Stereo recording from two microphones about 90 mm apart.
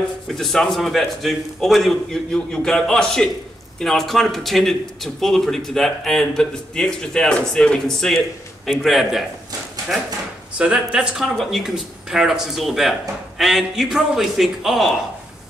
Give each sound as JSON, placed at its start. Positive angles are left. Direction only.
{"t": 0.3, "sound": "speech", "side_deg": 5}
{"t": 10.6, "sound": "speech", "side_deg": -10}